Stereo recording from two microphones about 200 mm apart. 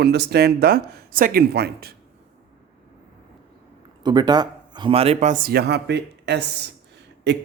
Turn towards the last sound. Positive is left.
turn(degrees=-60)  # may be behind; listen again after turning